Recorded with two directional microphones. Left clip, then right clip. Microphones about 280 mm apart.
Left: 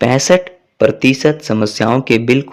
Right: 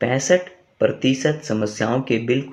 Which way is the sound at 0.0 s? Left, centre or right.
Left.